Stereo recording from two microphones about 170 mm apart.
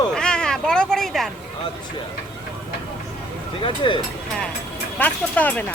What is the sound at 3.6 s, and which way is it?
Speech, 30° left (ahead or behind).